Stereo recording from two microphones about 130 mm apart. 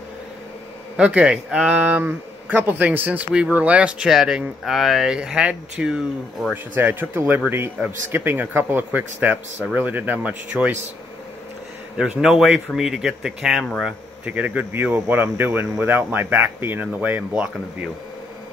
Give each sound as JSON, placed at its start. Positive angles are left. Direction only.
{"t": 0.9, "sound": "speech", "side_deg": -5}
{"t": 6.7, "sound": "speech", "side_deg": -15}
{"t": 12.0, "sound": "speech", "side_deg": -5}